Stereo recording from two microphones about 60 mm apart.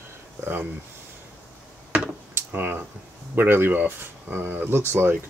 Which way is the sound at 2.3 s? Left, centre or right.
Right.